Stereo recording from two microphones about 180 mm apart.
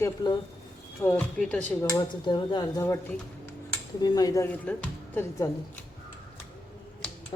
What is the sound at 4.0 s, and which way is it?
Speech, 20° left (ahead or behind).